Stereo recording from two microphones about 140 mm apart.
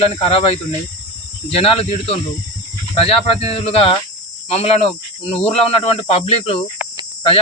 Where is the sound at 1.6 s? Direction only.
45° left (ahead or behind).